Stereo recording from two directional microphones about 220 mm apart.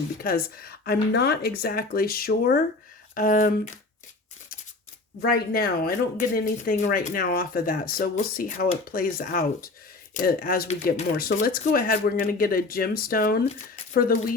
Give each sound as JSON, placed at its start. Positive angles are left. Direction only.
{"t": 0.2, "sound": "speech", "side_deg": 45}
{"t": 5.2, "sound": "speech", "side_deg": 40}